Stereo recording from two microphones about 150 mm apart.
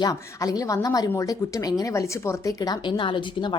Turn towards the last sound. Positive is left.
turn(degrees=35)  # may be behind; listen again after turning